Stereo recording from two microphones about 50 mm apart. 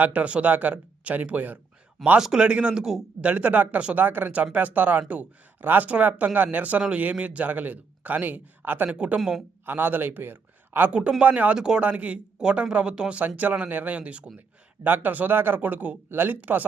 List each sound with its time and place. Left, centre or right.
0.0 s speech: right
2.1 s speech: centre
3.2 s speech: right
3.9 s speech: right
8.9 s speech: right
9.1 s speech: centre
9.6 s a man's voice: right
11.2 s speech: right
11.5 s speech: centre
11.8 s speech: right
13.2 s speech: right
14.8 s speech: right
16.0 s speech: right
16.3 s speech: right